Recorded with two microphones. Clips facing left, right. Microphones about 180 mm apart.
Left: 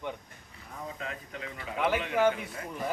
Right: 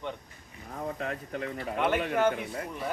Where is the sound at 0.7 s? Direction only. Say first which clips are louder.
Right 5 dB; 50° right (ahead or behind).